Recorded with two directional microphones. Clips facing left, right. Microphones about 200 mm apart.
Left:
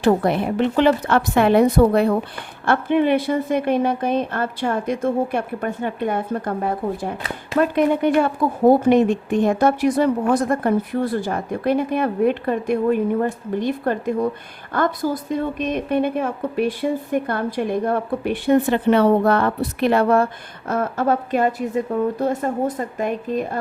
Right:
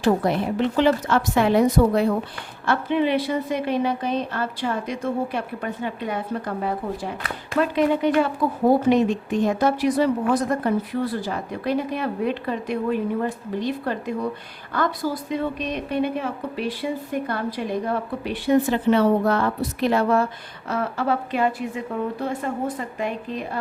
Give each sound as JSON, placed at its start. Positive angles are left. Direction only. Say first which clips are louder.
{"t": 0.0, "sound": "a woman's voice", "louder": "left 3 dB", "side_deg": 60}